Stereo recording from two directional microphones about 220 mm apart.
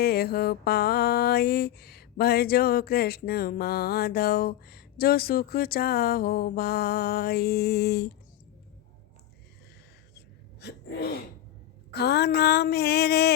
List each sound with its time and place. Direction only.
0.0 s mantra: 45° left (ahead or behind)
10.2 s sneeze: 50° left (ahead or behind)
11.9 s mantra: 45° left (ahead or behind)